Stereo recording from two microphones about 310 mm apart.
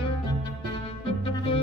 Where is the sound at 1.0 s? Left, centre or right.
Centre.